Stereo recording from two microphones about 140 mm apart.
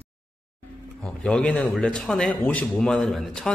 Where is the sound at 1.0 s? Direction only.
5° left (ahead or behind).